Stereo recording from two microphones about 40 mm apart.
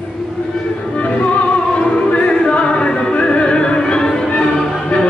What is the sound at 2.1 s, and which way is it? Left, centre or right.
Music, left.